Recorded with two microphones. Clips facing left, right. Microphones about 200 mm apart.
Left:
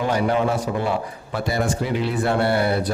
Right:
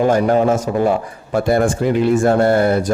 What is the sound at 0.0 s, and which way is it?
Speech, 45° right (ahead or behind).